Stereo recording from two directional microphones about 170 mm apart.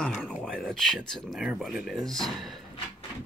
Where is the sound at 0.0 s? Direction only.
Centre (ahead or behind).